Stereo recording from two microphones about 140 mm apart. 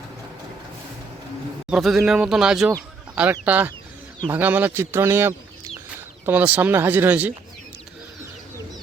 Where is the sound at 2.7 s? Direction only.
15° right (ahead or behind).